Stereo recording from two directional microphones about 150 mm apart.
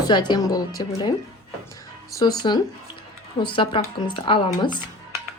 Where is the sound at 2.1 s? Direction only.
30° left (ahead or behind).